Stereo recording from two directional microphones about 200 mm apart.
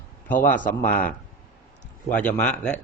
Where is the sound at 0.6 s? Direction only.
40° left (ahead or behind).